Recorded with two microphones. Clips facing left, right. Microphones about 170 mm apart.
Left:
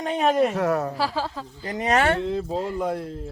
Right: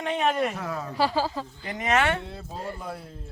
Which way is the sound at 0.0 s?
35° left (ahead or behind).